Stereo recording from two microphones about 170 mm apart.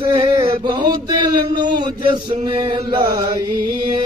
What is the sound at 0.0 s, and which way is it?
Chant, 30° right (ahead or behind).